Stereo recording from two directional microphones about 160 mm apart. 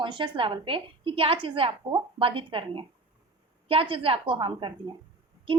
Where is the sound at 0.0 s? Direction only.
30° right (ahead or behind).